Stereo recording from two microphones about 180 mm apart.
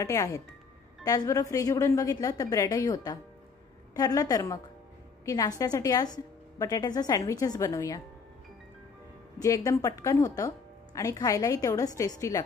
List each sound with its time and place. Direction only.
0.0 s a woman's voice: 20° left (ahead or behind)
9.4 s a woman's voice: 20° left (ahead or behind)